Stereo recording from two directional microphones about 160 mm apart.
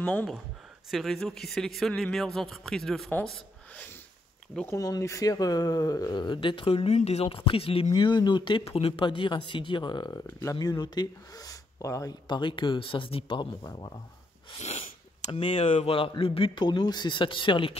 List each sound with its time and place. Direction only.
0.0 s speech: 10° left (ahead or behind)
3.3 s a sound: 10° left (ahead or behind)
4.6 s speech: 20° left (ahead or behind)
14.5 s sneeze: 45° left (ahead or behind)
15.3 s speech: 35° left (ahead or behind)